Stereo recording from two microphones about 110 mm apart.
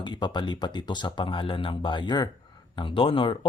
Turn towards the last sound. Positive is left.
turn(degrees=50)  # may be behind; listen again after turning